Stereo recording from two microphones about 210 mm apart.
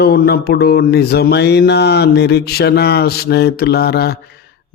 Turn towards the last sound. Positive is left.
turn(degrees=50)  # may be behind; listen again after turning